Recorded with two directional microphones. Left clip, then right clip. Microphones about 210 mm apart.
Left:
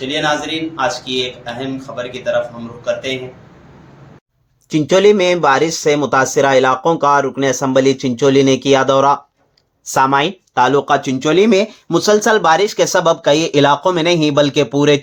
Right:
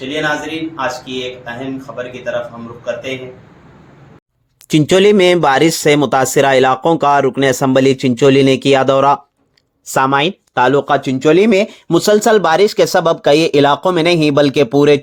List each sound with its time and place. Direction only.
0.0 s a man's voice: centre (ahead or behind)
4.7 s speech: 40° right (ahead or behind)